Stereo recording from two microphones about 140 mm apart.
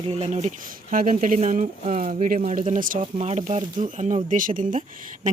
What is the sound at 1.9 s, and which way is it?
Speech, 60° right (ahead or behind).